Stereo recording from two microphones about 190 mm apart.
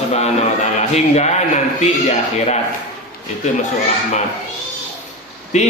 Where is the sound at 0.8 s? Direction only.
35° left (ahead or behind).